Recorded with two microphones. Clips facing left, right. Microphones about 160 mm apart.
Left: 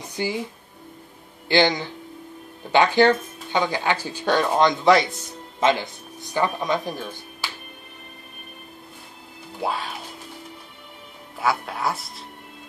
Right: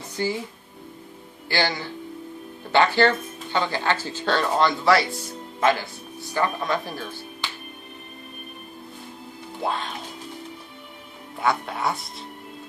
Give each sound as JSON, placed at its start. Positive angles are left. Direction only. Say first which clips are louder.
{"t": 0.2, "sound": "speech", "louder": "right 1 dB", "side_deg": 15}
{"t": 1.5, "sound": "speech", "louder": "left 6 dB", "side_deg": 20}
{"t": 9.6, "sound": "speech", "louder": "left 1 dB", "side_deg": 5}
{"t": 11.3, "sound": "speech", "louder": "even", "side_deg": 0}